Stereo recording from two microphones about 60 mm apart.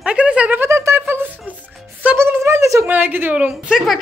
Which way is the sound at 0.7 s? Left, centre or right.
Right.